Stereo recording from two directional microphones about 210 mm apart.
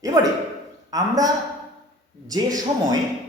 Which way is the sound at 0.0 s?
15° right (ahead or behind).